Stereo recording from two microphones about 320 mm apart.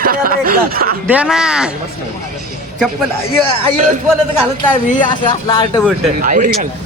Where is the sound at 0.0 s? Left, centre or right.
Right.